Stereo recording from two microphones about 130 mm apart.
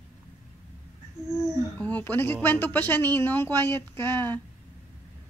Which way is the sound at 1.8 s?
10° left (ahead or behind).